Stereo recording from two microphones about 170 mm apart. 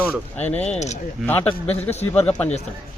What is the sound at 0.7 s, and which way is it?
Speech, 40° left (ahead or behind).